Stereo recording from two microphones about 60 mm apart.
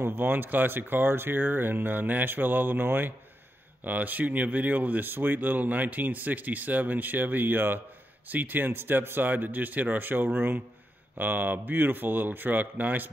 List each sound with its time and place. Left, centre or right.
0.0 s speech: right